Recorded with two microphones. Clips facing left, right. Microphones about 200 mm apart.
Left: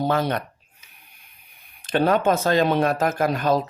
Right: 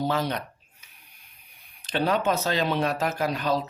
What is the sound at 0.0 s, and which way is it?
Speech, 55° left (ahead or behind).